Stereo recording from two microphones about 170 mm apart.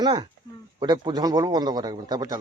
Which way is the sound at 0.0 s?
25° right (ahead or behind).